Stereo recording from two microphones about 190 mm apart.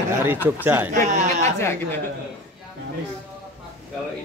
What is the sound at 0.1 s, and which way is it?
Speech, 10° right (ahead or behind).